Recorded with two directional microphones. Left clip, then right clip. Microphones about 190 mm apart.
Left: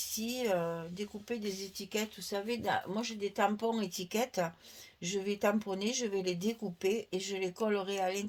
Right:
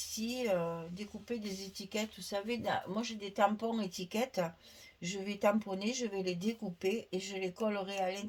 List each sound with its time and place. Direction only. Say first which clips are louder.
0.0 s speech: left 2 dB; 40° left (ahead or behind)